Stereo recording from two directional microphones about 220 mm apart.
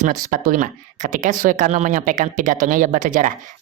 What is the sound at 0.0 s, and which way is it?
Speech, 40° right (ahead or behind).